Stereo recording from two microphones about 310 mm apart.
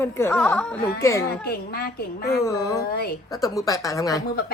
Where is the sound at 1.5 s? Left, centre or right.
Left.